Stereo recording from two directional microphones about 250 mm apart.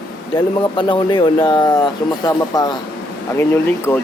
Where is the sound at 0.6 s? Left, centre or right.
Centre.